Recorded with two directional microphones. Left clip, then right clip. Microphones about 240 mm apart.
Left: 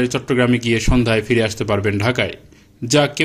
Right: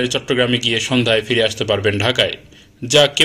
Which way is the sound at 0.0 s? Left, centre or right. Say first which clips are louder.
Right 1 dB; left.